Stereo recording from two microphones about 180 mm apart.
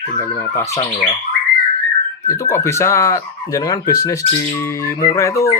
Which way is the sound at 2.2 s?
15° left (ahead or behind).